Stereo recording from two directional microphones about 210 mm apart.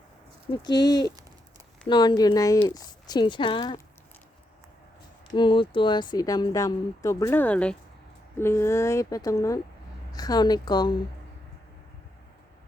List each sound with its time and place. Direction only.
0.5 s speech: 20° left (ahead or behind)
5.3 s speech: 20° left (ahead or behind)